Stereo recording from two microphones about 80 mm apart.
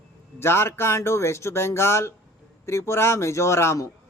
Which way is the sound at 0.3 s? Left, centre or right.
Left.